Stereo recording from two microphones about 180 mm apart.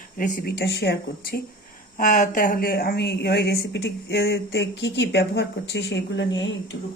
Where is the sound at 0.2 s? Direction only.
55° left (ahead or behind).